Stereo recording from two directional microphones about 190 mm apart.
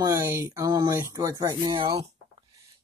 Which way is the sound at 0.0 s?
15° right (ahead or behind).